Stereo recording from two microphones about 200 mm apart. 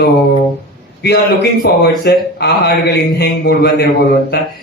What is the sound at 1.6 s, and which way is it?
A man's voice, 55° left (ahead or behind).